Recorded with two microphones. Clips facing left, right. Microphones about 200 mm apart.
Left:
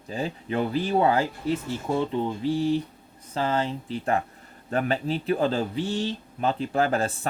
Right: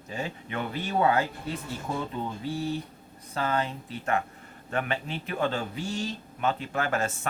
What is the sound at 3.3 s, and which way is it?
Speech, 30° left (ahead or behind).